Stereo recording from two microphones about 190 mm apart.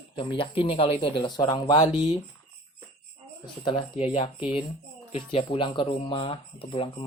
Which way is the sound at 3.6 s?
30° left (ahead or behind).